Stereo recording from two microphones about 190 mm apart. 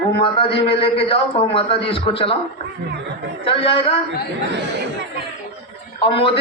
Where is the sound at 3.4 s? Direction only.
30° left (ahead or behind).